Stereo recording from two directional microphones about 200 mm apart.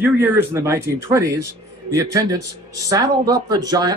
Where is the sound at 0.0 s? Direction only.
10° right (ahead or behind).